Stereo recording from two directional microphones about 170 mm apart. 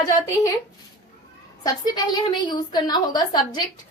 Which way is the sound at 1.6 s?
25° left (ahead or behind).